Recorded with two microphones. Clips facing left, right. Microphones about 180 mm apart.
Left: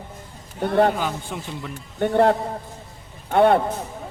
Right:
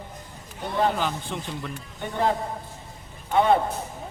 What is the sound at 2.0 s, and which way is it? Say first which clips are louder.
A man's voice: left 8 dB; 65° left (ahead or behind).